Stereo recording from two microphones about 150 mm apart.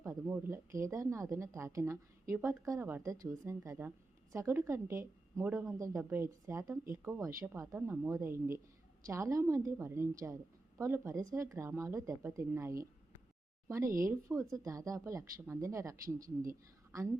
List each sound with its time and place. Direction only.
0.0 s speech: 20° right (ahead or behind)